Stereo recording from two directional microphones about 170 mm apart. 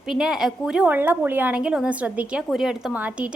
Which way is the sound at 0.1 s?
5° right (ahead or behind).